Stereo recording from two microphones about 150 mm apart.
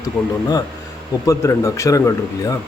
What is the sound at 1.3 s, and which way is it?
Speech, 20° left (ahead or behind).